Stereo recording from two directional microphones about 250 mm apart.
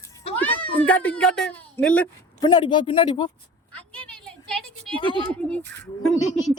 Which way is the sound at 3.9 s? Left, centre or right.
Centre.